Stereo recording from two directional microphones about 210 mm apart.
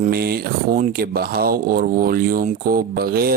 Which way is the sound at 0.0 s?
45° right (ahead or behind).